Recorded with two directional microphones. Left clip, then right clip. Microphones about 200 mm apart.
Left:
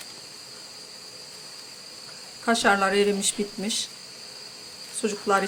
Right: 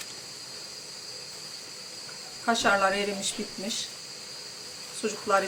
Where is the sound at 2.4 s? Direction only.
45° left (ahead or behind).